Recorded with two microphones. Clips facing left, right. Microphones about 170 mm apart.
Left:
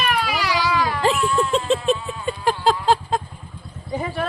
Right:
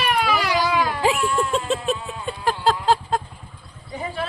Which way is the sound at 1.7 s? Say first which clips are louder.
Left 4 dB; centre (ahead or behind).